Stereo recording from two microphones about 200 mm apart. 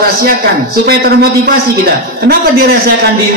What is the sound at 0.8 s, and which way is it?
A man's voice, 50° right (ahead or behind).